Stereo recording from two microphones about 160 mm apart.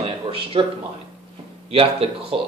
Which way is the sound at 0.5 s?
35° right (ahead or behind).